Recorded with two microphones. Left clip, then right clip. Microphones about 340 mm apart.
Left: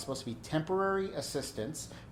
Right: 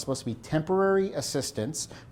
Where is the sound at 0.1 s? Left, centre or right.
Right.